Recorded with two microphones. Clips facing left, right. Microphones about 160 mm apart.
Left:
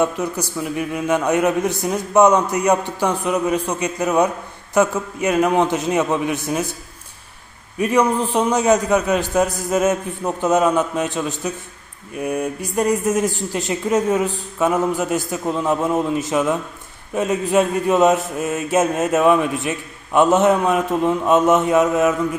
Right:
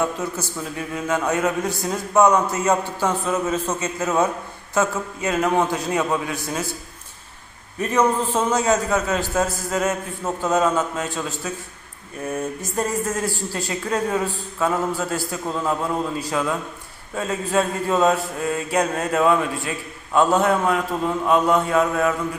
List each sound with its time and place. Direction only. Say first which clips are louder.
0.0 s speech: left 4 dB; 15° left (ahead or behind)
4.7 s mantra: left 4 dB; 20° left (ahead or behind)
7.8 s speech: left 3 dB; 10° left (ahead or behind)
10.2 s mantra: left 3 dB; 20° left (ahead or behind)